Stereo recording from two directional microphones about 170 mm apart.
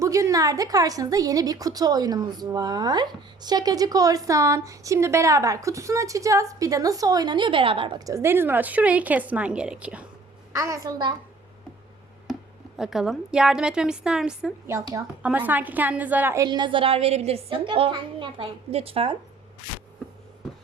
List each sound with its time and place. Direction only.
0.0 s a woman's voice: 20° right (ahead or behind)
10.5 s a woman's voice: 20° right (ahead or behind)
12.3 s speech: centre (ahead or behind)
14.7 s a woman's voice: 20° right (ahead or behind)
15.2 s a woman's voice: 10° right (ahead or behind); by 19.1 s 35° right (ahead or behind)